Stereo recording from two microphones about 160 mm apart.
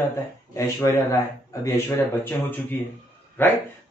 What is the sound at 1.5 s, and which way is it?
Speech, 20° left (ahead or behind).